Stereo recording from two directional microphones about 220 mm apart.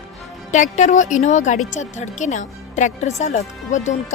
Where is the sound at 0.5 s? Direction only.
35° left (ahead or behind).